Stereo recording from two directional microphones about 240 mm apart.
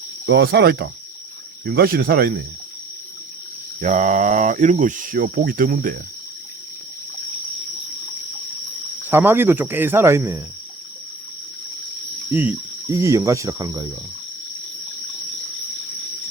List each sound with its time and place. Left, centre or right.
0.3 s speech: right
3.8 s speech: right
9.0 s speech: centre
12.3 s speech: centre